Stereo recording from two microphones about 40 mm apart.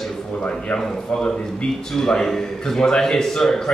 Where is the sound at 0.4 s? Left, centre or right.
Left.